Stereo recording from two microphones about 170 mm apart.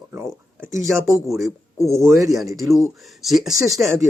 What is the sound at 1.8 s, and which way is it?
Speech, 15° right (ahead or behind).